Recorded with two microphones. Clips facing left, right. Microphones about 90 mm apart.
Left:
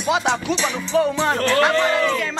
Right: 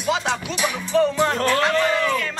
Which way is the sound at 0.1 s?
20° left (ahead or behind).